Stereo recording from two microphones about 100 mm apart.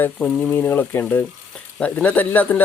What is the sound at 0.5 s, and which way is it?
Speech, 20° left (ahead or behind).